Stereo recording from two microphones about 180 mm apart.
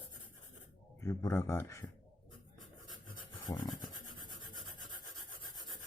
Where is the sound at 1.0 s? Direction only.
15° left (ahead or behind).